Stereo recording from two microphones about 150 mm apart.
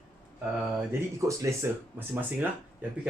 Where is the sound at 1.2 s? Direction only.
20° right (ahead or behind).